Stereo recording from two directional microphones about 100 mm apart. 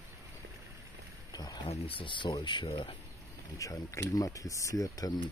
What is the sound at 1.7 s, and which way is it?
Speech, 75° left (ahead or behind).